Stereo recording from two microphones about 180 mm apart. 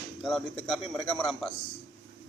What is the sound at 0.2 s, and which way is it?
Speech, 5° left (ahead or behind).